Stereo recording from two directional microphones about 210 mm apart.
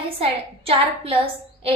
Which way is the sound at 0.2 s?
25° right (ahead or behind).